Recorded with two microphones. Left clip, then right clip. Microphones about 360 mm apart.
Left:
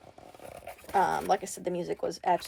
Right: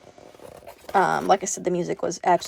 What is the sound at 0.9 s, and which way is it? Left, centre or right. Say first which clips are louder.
Speech: right 7 dB; right.